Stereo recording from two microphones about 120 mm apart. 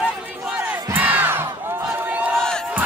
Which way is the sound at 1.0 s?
15° right (ahead or behind).